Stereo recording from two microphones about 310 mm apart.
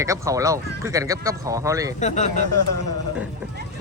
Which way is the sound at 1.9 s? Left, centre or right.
Left.